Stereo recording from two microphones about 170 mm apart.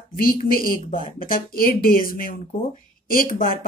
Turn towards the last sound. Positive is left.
turn(degrees=55)  # may be behind; listen again after turning